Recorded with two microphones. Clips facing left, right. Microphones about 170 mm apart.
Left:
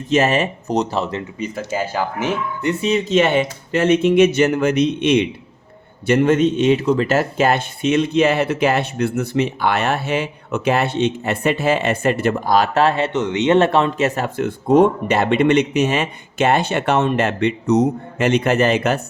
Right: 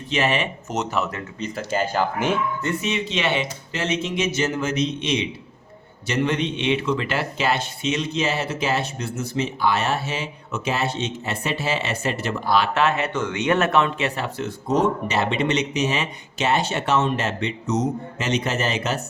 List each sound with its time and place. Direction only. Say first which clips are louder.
0.1 s speech: left 6 dB; 45° left (ahead or behind)
1.4 s speech: even; 5° left (ahead or behind)
2.8 s speech: left 12 dB; 40° left (ahead or behind)
13.1 s speech: left 6 dB; 20° left (ahead or behind); by 19.0 s 55° left (ahead or behind)